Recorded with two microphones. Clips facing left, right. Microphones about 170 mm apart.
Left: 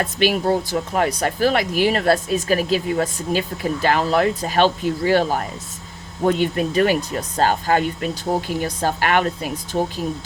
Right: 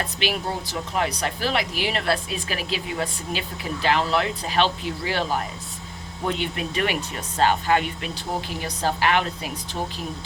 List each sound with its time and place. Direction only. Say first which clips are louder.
0.0 s speech: left 8 dB; 45° left (ahead or behind)